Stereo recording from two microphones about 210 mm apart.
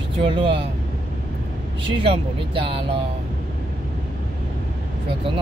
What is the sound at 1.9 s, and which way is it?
Speech, 25° right (ahead or behind).